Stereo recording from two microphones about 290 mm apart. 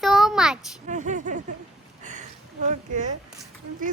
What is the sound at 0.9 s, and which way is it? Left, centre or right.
Speech, right.